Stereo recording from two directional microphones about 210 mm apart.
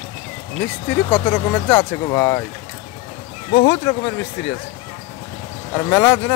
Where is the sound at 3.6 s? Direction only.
15° left (ahead or behind).